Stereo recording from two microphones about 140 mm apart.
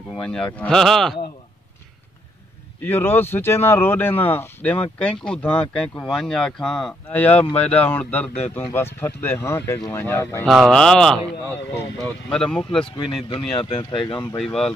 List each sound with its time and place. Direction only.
0.1 s speech: 5° left (ahead or behind)
2.8 s speech: 15° left (ahead or behind)
10.4 s speech: centre (ahead or behind)
12.8 s speech: 35° left (ahead or behind)
14.4 s speech: 5° left (ahead or behind)